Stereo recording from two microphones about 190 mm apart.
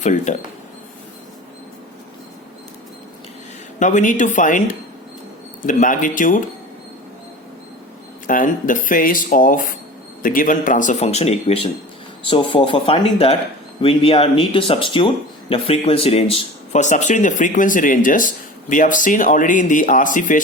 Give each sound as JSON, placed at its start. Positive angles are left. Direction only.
{"t": 0.0, "sound": "speech", "side_deg": 40}
{"t": 3.8, "sound": "speech", "side_deg": 40}
{"t": 8.3, "sound": "speech", "side_deg": 45}